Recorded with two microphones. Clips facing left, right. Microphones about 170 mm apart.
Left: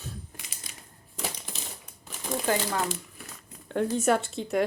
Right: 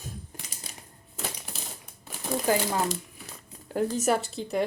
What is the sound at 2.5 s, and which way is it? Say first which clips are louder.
Speech: right 2 dB; 15° right (ahead or behind).